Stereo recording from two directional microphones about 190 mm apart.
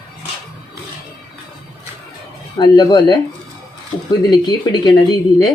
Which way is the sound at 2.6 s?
20° left (ahead or behind).